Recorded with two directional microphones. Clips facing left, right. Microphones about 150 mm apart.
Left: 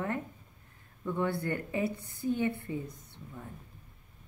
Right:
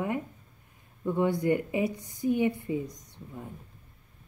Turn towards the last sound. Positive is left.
turn(degrees=-15)  # may be behind; listen again after turning